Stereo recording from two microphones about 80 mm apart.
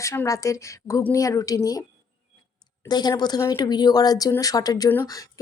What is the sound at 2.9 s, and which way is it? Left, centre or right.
A woman's voice, left.